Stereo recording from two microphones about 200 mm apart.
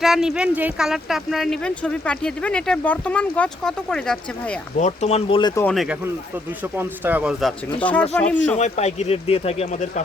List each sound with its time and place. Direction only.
0.0 s speech: centre (ahead or behind)
4.8 s speech: 35° left (ahead or behind)
5.6 s speech: centre (ahead or behind)
7.8 s speech: 5° left (ahead or behind)
8.5 s speech: 35° left (ahead or behind)